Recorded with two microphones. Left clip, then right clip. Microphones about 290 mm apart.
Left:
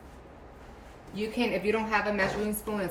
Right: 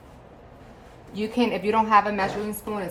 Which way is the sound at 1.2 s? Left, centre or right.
Centre.